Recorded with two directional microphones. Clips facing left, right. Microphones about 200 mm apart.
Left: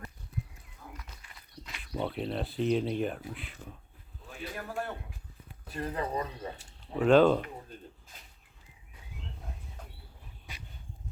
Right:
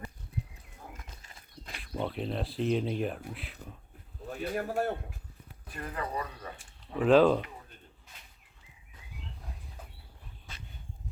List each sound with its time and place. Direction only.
1.4 s walk: 45° right (ahead or behind)
1.8 s speech: centre (ahead or behind)
4.3 s speech: 45° right (ahead or behind)
5.7 s speech: 30° left (ahead or behind)
7.0 s speech: centre (ahead or behind)
10.5 s a sound: 15° left (ahead or behind)